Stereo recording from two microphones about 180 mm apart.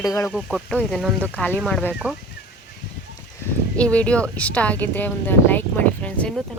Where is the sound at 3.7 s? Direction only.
5° left (ahead or behind).